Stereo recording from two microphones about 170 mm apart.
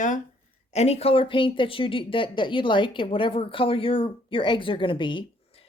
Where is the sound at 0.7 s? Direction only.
40° left (ahead or behind).